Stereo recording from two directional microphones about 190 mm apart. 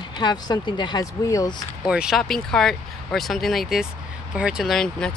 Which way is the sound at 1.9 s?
5° right (ahead or behind).